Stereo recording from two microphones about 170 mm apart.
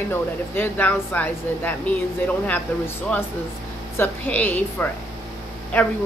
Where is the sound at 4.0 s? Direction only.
10° left (ahead or behind).